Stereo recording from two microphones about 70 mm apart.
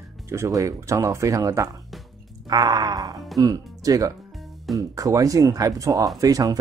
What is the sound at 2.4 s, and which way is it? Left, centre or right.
Groan, right.